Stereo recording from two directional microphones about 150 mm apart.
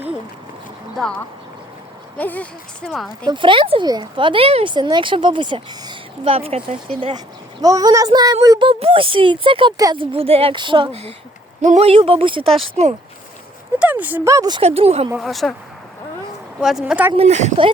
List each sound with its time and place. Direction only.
0.9 s speech: 5° left (ahead or behind)
3.2 s a woman's voice: 35° right (ahead or behind)
7.6 s a woman's voice: 25° right (ahead or behind)
12.8 s speech: 50° right (ahead or behind)
13.7 s speech: 10° right (ahead or behind)
14.6 s speech: 45° right (ahead or behind)
15.2 s speech: centre (ahead or behind)
16.6 s speech: 5° right (ahead or behind)
17.2 s speech: 50° right (ahead or behind)